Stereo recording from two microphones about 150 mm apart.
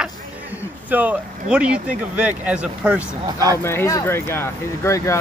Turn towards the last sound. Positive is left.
turn(degrees=20)  # may be behind; listen again after turning